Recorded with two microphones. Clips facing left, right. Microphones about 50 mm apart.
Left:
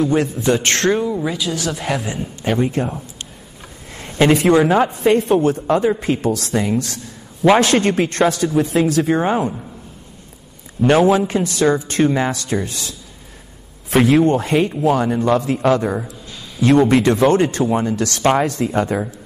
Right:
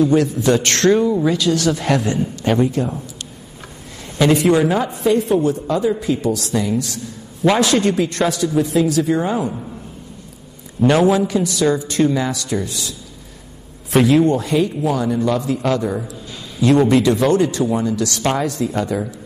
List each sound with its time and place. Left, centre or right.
0.0 s a man's voice: left
1.2 s a woman's voice: centre
2.6 s a woman's voice: left
4.0 s a man's voice: left
10.9 s a man's voice: centre
11.1 s a woman's voice: left